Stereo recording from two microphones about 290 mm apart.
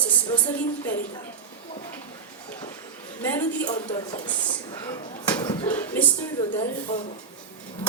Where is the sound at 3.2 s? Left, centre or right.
Centre.